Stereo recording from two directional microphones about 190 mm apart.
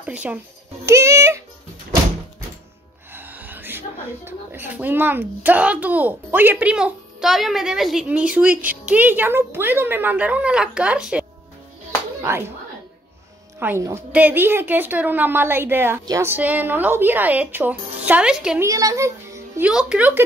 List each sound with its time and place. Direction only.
0.0 s a child's voice: 5° right (ahead or behind)
3.1 s speech: 10° right (ahead or behind)
13.6 s speech: 10° right (ahead or behind)
18.6 s a child's voice: 15° right (ahead or behind)